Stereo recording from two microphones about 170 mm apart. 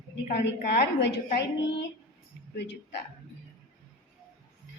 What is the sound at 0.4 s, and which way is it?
A woman's voice, 80° left.